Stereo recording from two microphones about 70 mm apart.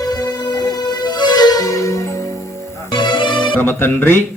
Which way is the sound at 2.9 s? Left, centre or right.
Left.